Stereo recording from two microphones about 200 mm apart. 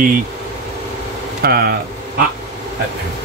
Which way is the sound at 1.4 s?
50° right (ahead or behind).